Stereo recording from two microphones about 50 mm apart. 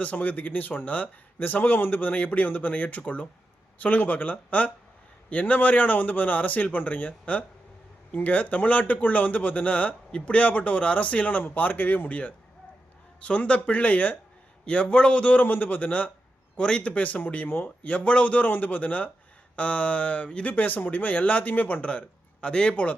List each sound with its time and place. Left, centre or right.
0.0 s a man's voice: left
14.6 s a man's voice: left
16.6 s a man's voice: centre; by 21.8 s left
21.8 s speech: left
22.7 s a man's voice: left